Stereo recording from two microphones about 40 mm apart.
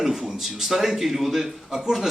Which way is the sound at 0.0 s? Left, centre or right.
Centre.